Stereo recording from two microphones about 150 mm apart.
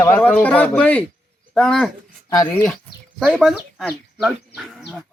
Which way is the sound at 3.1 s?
5° left (ahead or behind).